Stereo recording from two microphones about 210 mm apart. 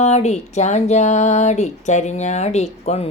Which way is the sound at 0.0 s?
30° left (ahead or behind).